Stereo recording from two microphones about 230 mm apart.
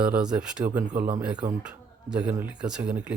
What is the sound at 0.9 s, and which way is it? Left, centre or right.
Speech, right.